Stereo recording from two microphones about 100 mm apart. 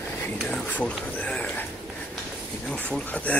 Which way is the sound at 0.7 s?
15° left (ahead or behind).